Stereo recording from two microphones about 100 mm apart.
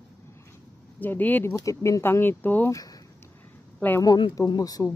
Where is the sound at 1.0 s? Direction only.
20° left (ahead or behind).